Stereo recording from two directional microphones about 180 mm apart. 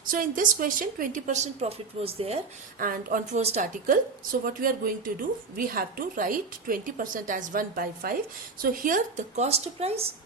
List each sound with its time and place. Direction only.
0.0 s a woman's voice: 50° right (ahead or behind); by 2.4 s 35° right (ahead or behind)
2.7 s a woman's voice: 50° right (ahead or behind); by 10.1 s 35° right (ahead or behind)